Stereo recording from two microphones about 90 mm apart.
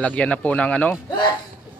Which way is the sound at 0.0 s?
15° left (ahead or behind).